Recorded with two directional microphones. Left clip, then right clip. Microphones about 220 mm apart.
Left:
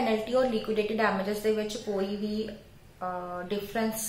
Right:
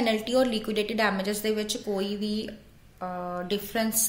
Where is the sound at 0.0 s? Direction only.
55° right (ahead or behind).